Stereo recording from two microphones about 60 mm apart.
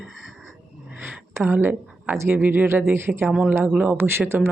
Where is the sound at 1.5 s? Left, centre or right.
Right.